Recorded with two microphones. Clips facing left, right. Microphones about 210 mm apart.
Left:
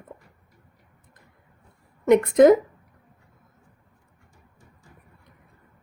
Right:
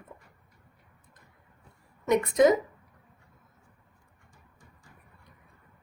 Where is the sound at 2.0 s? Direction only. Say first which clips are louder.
Left 7 dB; 55° left (ahead or behind).